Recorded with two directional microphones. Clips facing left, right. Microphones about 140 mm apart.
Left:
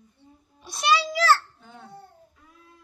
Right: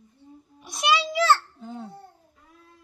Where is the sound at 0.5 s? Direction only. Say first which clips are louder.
Left 1 dB; 15° right (ahead or behind); by 1.8 s 30° right (ahead or behind).